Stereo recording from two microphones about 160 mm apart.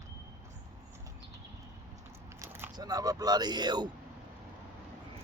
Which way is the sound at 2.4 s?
15° right (ahead or behind).